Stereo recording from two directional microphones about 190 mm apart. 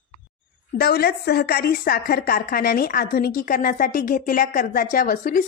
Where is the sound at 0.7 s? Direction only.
55° left (ahead or behind).